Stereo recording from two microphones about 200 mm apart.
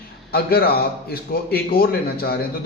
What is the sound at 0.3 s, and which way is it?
A man's voice, 50° left (ahead or behind).